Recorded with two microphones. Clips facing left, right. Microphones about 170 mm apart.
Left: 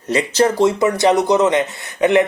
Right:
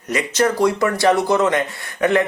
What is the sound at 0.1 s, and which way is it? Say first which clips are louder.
Speech: left 3 dB; 30° left (ahead or behind).